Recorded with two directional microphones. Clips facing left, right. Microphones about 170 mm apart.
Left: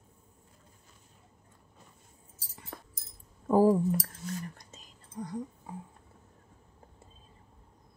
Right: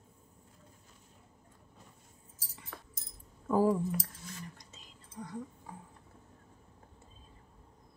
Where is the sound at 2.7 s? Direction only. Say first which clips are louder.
Left 4 dB; 40° left (ahead or behind).